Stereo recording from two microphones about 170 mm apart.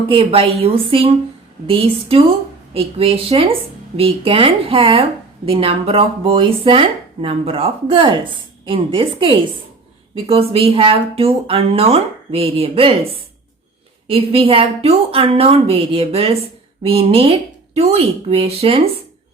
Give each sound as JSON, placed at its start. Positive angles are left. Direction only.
{"t": 0.1, "sound": "speech", "side_deg": -35}